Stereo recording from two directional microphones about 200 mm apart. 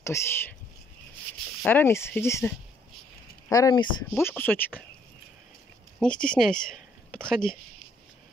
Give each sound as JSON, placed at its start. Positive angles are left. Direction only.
{"t": 0.0, "sound": "speech", "side_deg": 15}
{"t": 1.6, "sound": "speech", "side_deg": 10}
{"t": 5.9, "sound": "speech", "side_deg": 5}